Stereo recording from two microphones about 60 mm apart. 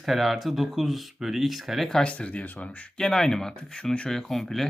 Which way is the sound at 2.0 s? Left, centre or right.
Left.